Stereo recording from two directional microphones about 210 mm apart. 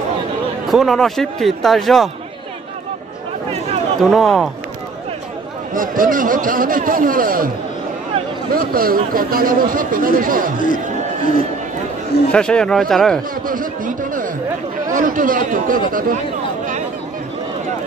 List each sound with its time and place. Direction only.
0.7 s speech: centre (ahead or behind)
4.0 s speech: centre (ahead or behind)
5.8 s speech: 40° right (ahead or behind)
12.3 s speech: 5° left (ahead or behind)
13.5 s speech: 40° right (ahead or behind)